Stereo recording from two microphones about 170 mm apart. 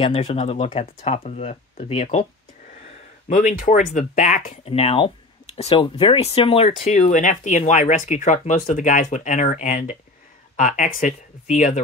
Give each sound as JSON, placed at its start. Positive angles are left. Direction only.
{"t": 0.0, "sound": "speech", "side_deg": 35}
{"t": 3.3, "sound": "speech", "side_deg": 45}